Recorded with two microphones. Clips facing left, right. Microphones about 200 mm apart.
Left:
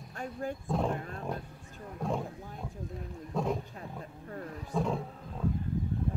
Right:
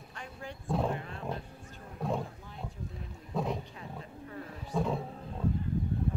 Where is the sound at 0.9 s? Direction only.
45° left (ahead or behind).